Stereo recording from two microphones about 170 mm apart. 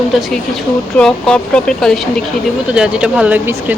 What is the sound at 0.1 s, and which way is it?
Speech, centre (ahead or behind).